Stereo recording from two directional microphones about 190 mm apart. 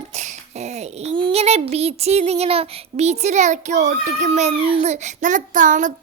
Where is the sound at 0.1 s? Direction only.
35° right (ahead or behind).